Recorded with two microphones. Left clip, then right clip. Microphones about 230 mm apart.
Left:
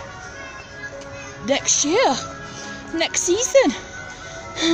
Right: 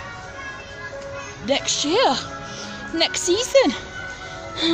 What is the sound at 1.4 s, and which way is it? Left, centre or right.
Speech, centre.